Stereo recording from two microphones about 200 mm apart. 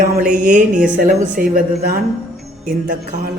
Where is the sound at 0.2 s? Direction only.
40° right (ahead or behind).